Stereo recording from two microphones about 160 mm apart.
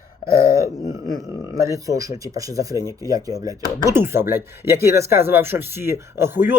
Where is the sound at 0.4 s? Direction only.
20° right (ahead or behind).